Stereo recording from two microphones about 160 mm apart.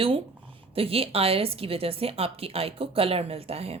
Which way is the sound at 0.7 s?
35° right (ahead or behind).